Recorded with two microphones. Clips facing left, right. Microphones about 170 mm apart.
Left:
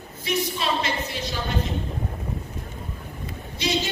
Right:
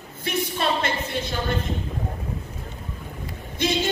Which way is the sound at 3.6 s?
50° right (ahead or behind).